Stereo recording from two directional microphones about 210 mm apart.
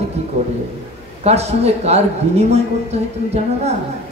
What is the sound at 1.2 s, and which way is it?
A woman's voice, 30° right (ahead or behind).